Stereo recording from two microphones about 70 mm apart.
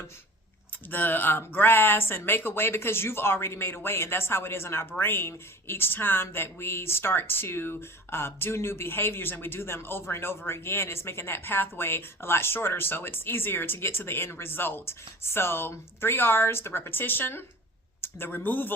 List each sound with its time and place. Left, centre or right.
0.9 s speech: left